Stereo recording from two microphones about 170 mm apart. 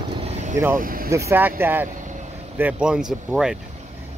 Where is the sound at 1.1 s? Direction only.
15° right (ahead or behind).